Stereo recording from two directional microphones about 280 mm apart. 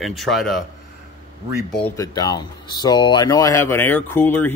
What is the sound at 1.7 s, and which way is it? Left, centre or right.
Speech, centre.